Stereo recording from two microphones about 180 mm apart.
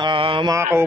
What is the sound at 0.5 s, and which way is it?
Mantra, 15° right (ahead or behind).